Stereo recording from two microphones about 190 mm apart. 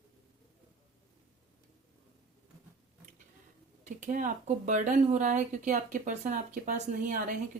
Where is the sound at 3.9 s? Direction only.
40° right (ahead or behind).